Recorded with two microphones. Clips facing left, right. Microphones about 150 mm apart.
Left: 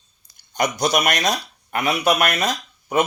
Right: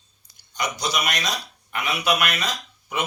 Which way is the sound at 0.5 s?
50° left (ahead or behind).